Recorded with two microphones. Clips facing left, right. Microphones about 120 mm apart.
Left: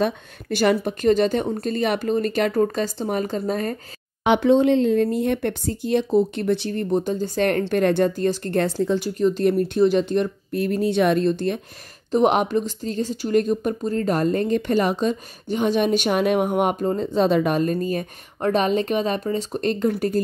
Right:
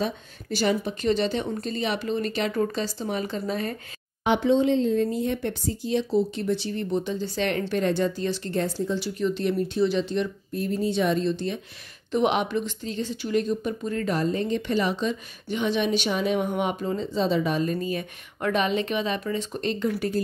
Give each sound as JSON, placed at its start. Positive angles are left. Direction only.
{"t": 0.0, "sound": "a woman's voice", "side_deg": 60}
{"t": 4.2, "sound": "speech", "side_deg": 70}
{"t": 8.5, "sound": "speech", "side_deg": 70}
{"t": 9.0, "sound": "a woman's voice", "side_deg": 45}
{"t": 10.5, "sound": "speech", "side_deg": 70}
{"t": 12.1, "sound": "a woman's voice", "side_deg": 40}
{"t": 13.8, "sound": "a woman's voice", "side_deg": 35}
{"t": 14.1, "sound": "a woman's voice", "side_deg": 50}